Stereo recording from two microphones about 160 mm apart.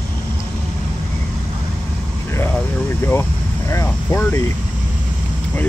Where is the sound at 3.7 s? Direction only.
15° left (ahead or behind).